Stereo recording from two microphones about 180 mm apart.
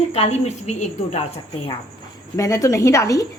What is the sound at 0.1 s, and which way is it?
A woman's voice, 35° left (ahead or behind).